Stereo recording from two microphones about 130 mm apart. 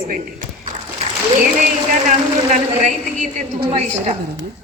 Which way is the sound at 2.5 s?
70° right (ahead or behind).